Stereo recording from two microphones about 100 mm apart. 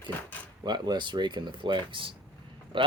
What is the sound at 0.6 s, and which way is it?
Speech, 45° right (ahead or behind).